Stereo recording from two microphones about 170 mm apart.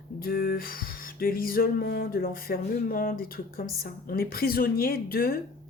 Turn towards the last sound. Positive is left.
turn(degrees=65)  # may be behind; listen again after turning